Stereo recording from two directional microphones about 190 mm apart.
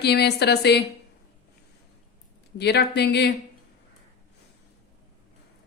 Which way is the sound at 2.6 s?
60° left (ahead or behind).